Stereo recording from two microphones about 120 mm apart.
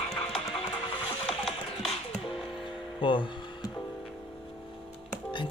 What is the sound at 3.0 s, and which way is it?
Speech, 45° left (ahead or behind).